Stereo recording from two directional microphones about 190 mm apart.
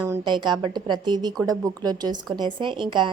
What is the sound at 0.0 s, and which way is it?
A woman's voice, 20° right (ahead or behind).